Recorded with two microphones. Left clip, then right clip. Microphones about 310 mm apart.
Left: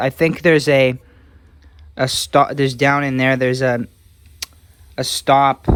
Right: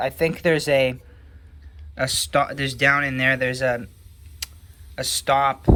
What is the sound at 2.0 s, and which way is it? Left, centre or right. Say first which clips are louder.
Speech: left 6 dB; centre.